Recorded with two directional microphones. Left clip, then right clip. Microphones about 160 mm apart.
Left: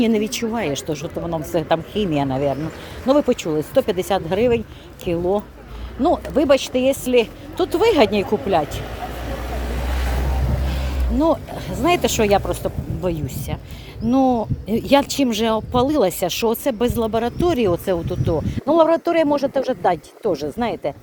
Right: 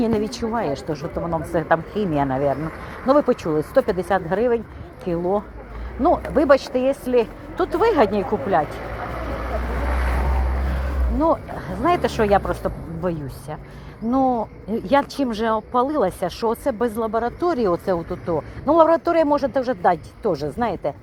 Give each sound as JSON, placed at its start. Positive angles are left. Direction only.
{"t": 0.0, "sound": "speech", "side_deg": 35}
{"t": 6.2, "sound": "speech", "side_deg": 20}
{"t": 11.2, "sound": "speech", "side_deg": 35}